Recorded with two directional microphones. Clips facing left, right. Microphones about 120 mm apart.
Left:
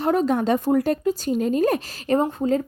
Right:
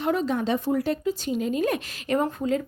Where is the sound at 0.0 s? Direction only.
45° left (ahead or behind).